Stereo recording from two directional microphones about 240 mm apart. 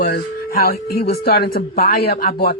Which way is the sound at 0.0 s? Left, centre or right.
Left.